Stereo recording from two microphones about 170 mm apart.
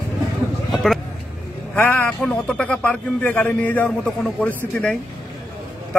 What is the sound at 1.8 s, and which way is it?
A man's voice, 10° left (ahead or behind).